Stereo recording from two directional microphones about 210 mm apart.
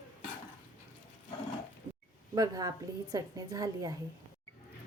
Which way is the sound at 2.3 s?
15° right (ahead or behind).